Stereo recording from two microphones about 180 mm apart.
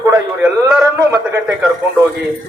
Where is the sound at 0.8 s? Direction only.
20° right (ahead or behind).